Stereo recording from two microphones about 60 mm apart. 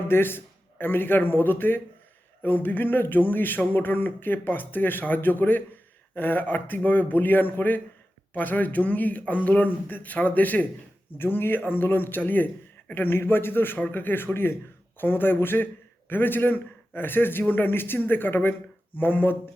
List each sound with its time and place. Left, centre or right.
0.1 s a man's voice: left